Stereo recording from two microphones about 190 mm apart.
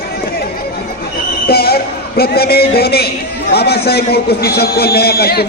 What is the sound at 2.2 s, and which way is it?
A man's voice, 55° left (ahead or behind).